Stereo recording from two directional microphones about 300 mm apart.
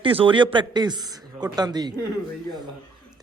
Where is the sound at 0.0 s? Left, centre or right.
Centre.